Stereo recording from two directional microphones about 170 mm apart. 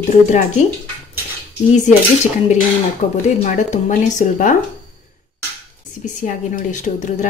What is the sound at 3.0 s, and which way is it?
Cutlery, 45° left (ahead or behind).